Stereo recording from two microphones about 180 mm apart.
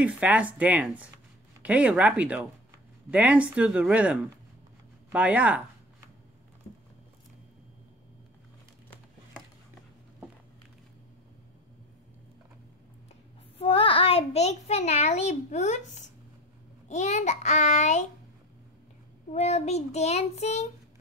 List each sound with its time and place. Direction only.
0.0 s speech: 5° right (ahead or behind)
13.6 s a child's voice: 30° left (ahead or behind)
19.3 s a child's voice: 35° left (ahead or behind)